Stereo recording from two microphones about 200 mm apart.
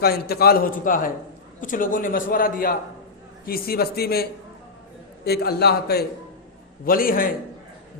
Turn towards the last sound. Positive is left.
turn(degrees=45)  # may be behind; listen again after turning